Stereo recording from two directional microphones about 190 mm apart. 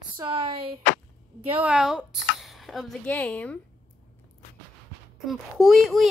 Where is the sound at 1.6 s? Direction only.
5° right (ahead or behind).